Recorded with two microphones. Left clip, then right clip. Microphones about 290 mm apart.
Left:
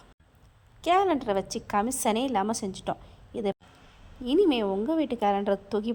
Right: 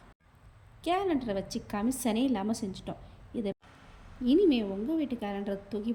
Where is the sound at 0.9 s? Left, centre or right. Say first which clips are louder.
Left 6 dB; centre.